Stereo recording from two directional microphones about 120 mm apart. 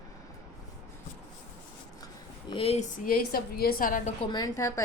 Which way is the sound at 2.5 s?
50° left (ahead or behind).